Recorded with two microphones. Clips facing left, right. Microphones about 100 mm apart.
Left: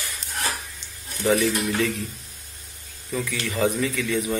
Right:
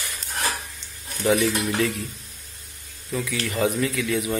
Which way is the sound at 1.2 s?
5° right (ahead or behind).